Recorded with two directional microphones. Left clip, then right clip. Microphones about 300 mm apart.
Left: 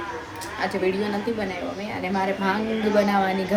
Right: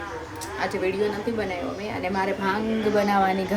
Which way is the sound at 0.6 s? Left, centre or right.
Centre.